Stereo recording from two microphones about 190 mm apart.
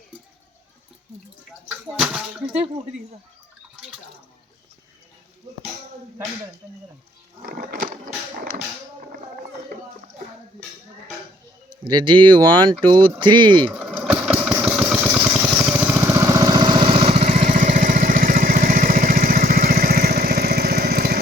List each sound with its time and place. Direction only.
1.6 s speech: 5° right (ahead or behind)
7.4 s a sound: 45° right (ahead or behind)
11.7 s speech: 25° right (ahead or behind)
13.7 s vehicle: 5° right (ahead or behind); by 21.2 s 55° right (ahead or behind)